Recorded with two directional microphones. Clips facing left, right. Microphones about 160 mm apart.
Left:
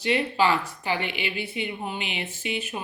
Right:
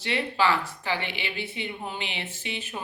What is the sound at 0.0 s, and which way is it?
A woman's voice, 15° left (ahead or behind).